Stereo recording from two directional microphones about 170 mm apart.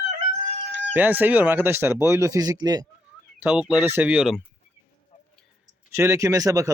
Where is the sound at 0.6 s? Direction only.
90° right.